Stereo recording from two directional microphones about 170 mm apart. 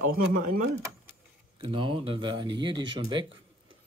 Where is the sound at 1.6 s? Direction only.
30° right (ahead or behind).